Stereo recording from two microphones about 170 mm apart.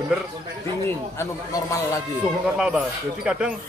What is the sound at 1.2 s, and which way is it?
Speech, 20° left (ahead or behind).